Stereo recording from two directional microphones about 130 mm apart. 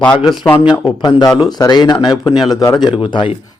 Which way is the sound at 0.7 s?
35° left (ahead or behind).